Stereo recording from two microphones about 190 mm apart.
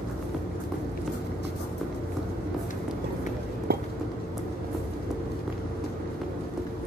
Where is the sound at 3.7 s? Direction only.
55° right (ahead or behind).